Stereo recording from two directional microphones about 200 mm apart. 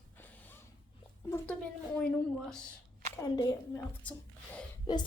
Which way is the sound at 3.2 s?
20° left (ahead or behind).